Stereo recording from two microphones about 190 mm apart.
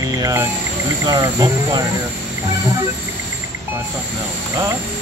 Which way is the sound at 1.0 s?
20° right (ahead or behind).